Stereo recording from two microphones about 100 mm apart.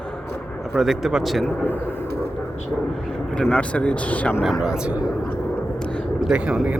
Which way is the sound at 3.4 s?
15° left (ahead or behind).